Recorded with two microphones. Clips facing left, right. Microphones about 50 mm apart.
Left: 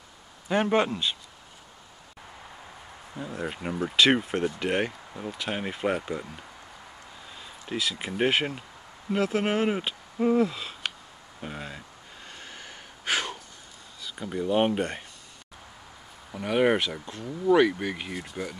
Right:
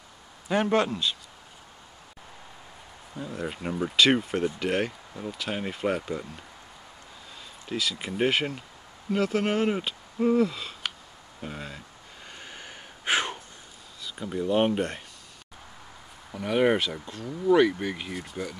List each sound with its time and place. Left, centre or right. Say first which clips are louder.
0.5 s speech: even; centre
3.2 s speech: even; centre
12.3 s breathing: right 1 dB; centre
13.1 s a sound: right 2 dB; right
14.0 s speech: even; centre
16.3 s speech: even; centre